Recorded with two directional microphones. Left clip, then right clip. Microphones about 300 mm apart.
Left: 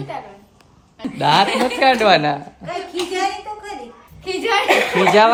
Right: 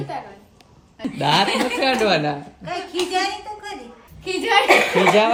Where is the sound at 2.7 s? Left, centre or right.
Centre.